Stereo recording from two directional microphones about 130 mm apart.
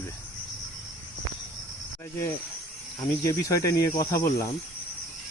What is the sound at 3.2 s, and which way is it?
Cricket, 25° left (ahead or behind).